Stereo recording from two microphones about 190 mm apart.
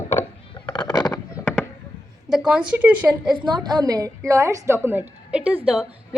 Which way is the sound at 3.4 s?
25° right (ahead or behind).